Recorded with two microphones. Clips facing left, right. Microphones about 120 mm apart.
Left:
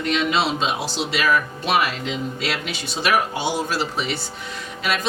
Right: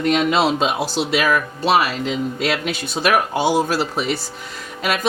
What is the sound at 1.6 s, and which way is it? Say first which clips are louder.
Speech: right 4 dB; 30° right (ahead or behind).